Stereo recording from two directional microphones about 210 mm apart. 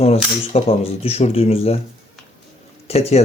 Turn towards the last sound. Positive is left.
turn(degrees=30)  # may be behind; listen again after turning